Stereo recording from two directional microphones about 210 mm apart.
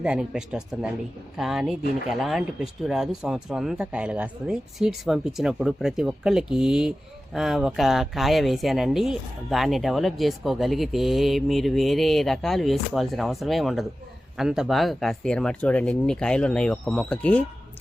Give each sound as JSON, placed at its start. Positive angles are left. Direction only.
{"t": 0.0, "sound": "speech", "side_deg": -5}